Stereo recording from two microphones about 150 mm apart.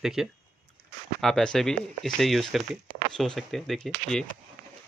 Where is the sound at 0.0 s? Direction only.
5° right (ahead or behind).